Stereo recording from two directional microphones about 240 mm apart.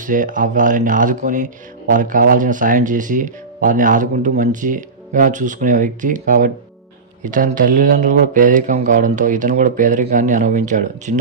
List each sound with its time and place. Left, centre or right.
0.0 s speech: right